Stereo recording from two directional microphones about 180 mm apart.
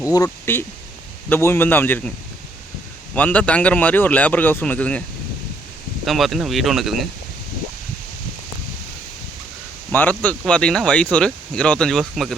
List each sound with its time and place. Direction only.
0.0 s speech: 20° left (ahead or behind)
3.2 s speech: 5° left (ahead or behind)
6.1 s speech: centre (ahead or behind)
9.9 s speech: 10° left (ahead or behind)